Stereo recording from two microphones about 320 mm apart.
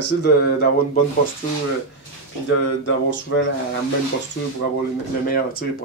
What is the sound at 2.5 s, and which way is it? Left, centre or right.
Speech, left.